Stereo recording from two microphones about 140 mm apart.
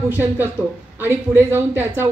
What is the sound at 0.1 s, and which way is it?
Speech, 15° right (ahead or behind).